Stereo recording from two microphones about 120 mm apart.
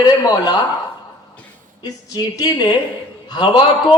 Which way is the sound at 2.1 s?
35° left (ahead or behind).